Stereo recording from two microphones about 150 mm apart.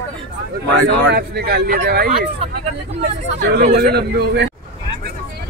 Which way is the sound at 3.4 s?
90° right.